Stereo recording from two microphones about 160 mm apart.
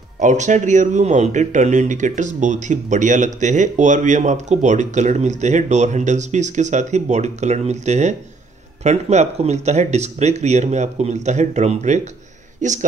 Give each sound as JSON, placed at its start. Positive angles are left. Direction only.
{"t": 0.2, "sound": "speech", "side_deg": -50}